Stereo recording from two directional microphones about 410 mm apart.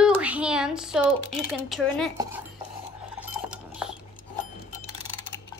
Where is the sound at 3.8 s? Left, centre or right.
Centre.